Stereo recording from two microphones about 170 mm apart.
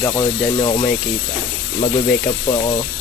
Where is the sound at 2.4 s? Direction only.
30° left (ahead or behind).